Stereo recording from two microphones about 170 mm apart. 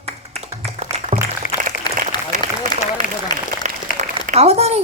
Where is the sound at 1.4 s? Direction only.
50° left (ahead or behind).